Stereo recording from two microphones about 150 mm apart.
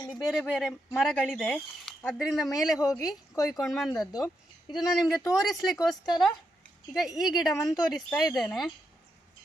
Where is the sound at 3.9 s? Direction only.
25° left (ahead or behind).